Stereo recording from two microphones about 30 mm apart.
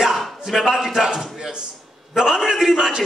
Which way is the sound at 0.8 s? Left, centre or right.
Centre.